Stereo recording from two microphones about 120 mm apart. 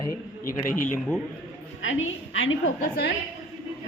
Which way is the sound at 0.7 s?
90° left.